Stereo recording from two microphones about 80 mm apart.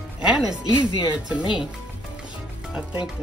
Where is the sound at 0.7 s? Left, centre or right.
Centre.